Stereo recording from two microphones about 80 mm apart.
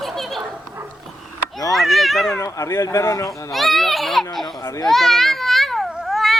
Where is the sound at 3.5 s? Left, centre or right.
Centre.